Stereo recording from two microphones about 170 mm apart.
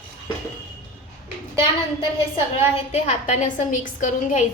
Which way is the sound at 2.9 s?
40° left (ahead or behind).